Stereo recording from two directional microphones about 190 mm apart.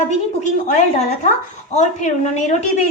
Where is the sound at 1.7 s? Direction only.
40° left (ahead or behind).